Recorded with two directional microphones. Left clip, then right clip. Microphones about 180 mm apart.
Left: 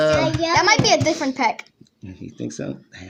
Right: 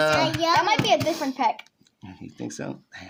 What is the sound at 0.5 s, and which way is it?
A child's voice, centre (ahead or behind).